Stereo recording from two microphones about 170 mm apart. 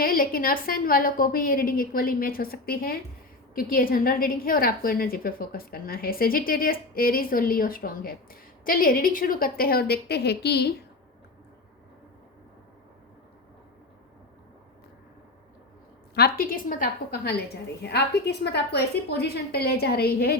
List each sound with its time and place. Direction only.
0.0 s a woman's voice: 55° left (ahead or behind); by 10.8 s 75° left (ahead or behind)
16.1 s a woman's voice: 65° left (ahead or behind)